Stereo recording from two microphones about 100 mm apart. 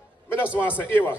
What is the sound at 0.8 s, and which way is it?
Speech, 20° left (ahead or behind).